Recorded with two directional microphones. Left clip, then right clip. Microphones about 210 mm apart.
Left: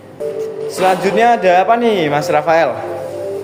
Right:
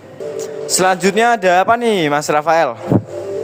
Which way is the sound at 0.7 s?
55° right (ahead or behind).